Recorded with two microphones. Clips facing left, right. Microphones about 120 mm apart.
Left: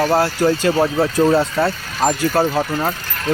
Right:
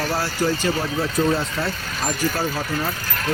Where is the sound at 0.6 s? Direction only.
75° left (ahead or behind).